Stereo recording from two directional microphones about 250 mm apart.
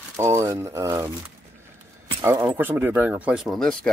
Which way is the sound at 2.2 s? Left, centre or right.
Centre.